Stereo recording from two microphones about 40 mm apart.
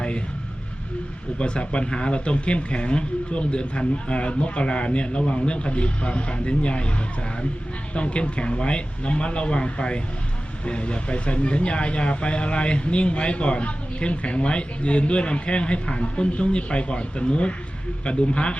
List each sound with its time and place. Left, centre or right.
1.4 s speech: left
7.9 s speech: left